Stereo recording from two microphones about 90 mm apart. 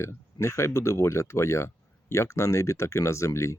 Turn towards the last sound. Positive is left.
turn(degrees=35)  # may be behind; listen again after turning